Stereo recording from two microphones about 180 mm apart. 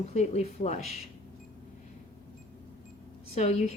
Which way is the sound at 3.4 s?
40° left (ahead or behind).